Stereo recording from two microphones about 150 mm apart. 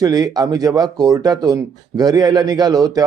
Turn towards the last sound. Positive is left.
turn(degrees=-25)  # may be behind; listen again after turning